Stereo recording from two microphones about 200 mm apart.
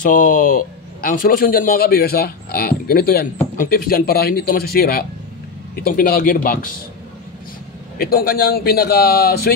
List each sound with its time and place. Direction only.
0.0 s a man's voice: 40° left (ahead or behind)
8.0 s a man's voice: 45° left (ahead or behind)